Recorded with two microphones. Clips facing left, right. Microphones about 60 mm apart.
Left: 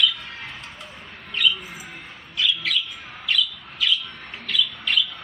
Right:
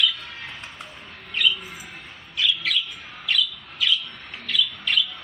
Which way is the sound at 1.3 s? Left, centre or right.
Centre.